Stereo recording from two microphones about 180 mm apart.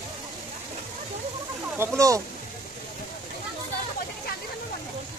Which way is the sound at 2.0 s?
20° right (ahead or behind).